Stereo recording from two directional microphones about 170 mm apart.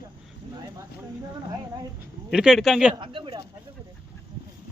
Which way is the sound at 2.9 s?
30° right (ahead or behind).